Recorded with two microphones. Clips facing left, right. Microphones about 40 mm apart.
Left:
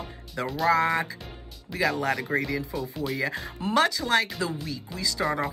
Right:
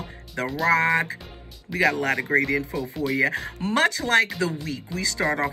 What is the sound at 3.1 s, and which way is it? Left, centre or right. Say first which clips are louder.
Speech: right 6 dB; right.